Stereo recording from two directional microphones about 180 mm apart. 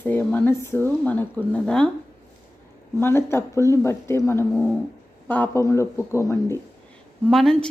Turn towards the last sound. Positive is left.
turn(degrees=0)  # may be behind; listen again after turning